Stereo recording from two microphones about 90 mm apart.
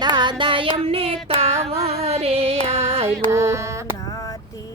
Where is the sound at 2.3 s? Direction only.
90° right.